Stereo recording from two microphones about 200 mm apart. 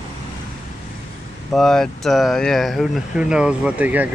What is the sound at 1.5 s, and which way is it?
Speech, 5° left (ahead or behind).